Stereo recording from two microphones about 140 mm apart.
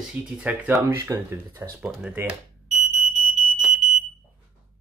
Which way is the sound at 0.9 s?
20° right (ahead or behind).